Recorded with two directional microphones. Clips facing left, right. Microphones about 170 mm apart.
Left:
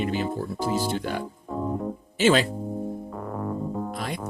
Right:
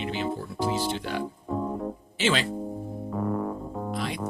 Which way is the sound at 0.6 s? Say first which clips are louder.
Left 1 dB; centre (ahead or behind).